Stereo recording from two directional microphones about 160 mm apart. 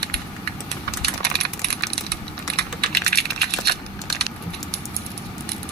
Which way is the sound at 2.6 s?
85° right.